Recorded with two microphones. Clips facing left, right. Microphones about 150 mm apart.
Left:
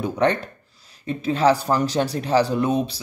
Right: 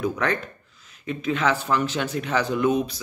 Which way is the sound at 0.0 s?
30° left (ahead or behind).